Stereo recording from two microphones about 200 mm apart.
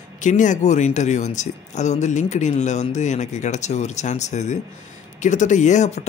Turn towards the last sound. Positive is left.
turn(degrees=35)  # may be behind; listen again after turning